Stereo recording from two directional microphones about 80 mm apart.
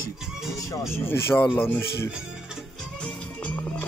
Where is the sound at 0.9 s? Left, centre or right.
Left.